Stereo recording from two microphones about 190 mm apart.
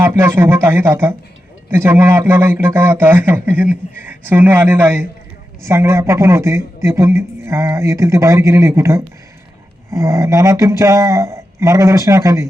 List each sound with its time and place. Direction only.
0.0 s a man's voice: 15° right (ahead or behind)